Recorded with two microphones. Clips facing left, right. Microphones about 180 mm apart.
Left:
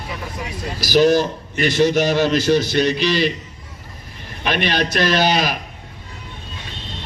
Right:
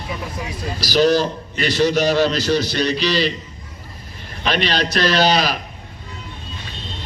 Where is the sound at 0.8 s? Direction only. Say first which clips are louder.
Left 1 dB; 50° left (ahead or behind).